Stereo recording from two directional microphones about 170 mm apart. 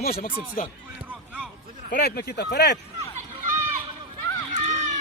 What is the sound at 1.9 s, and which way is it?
Speech, 65° left (ahead or behind).